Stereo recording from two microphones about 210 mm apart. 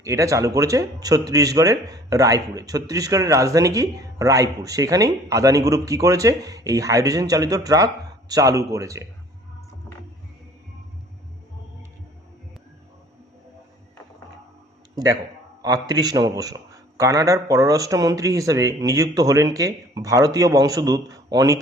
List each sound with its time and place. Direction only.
0.0 s speech: 15° right (ahead or behind)
15.6 s speech: 20° right (ahead or behind)